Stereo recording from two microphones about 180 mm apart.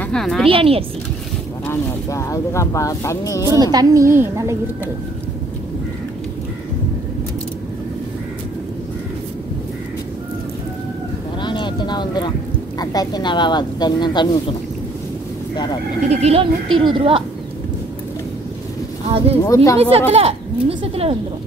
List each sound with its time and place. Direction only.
0.0 s a woman's voice: 5° left (ahead or behind)
0.5 s speech: 30° right (ahead or behind)
1.7 s speech: 15° left (ahead or behind)
3.5 s a woman's voice: 20° right (ahead or behind)
11.4 s vehicle: 25° left (ahead or behind)
12.7 s a woman's voice: 20° left (ahead or behind)
16.1 s speech: 35° right (ahead or behind)
19.0 s speech: 30° right (ahead or behind)
19.4 s speech: 15° left (ahead or behind)
20.1 s speech: 35° right (ahead or behind)